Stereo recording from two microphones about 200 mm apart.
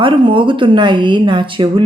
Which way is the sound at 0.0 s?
25° right (ahead or behind).